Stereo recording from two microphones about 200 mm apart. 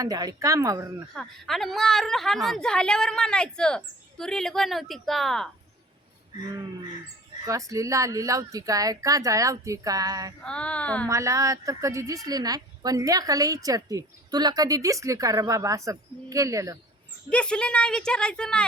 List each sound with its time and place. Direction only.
0.0 s a woman's voice: 20° right (ahead or behind)
1.1 s a woman's voice: centre (ahead or behind)
7.4 s a woman's voice: 15° right (ahead or behind)
10.4 s a sound: 5° left (ahead or behind)
11.1 s a woman's voice: 15° right (ahead or behind)
17.2 s a woman's voice: 5° left (ahead or behind)